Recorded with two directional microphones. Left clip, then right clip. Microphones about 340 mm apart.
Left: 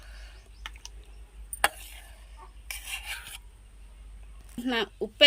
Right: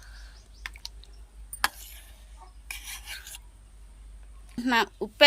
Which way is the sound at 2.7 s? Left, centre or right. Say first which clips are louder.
Left 3 dB; centre.